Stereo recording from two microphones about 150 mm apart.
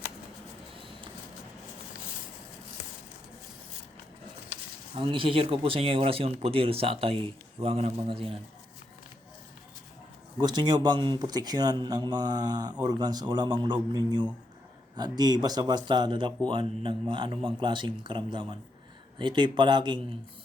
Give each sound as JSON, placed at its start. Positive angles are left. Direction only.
{"t": 4.9, "sound": "speech", "side_deg": -35}
{"t": 10.4, "sound": "speech", "side_deg": -30}